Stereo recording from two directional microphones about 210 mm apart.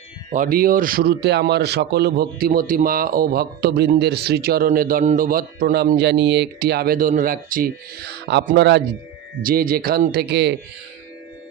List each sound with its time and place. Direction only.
0.3 s speech: 40° right (ahead or behind)
9.4 s speech: 45° right (ahead or behind)